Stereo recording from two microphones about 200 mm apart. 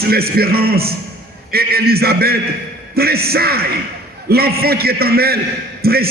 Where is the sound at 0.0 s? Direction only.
50° right (ahead or behind).